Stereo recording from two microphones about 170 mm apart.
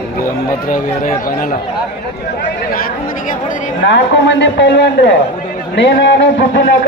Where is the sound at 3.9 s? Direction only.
90° left.